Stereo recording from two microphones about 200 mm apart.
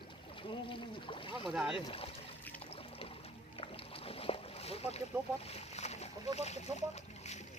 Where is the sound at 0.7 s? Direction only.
25° left (ahead or behind).